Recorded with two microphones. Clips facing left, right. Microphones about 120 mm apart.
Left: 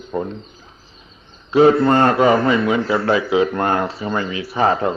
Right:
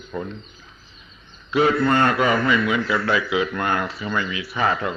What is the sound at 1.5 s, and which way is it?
A man's voice, 35° left (ahead or behind).